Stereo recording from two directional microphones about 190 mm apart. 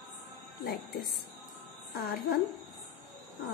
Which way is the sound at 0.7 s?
60° left (ahead or behind).